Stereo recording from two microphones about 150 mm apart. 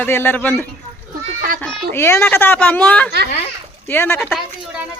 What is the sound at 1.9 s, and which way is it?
Speech, 15° left (ahead or behind).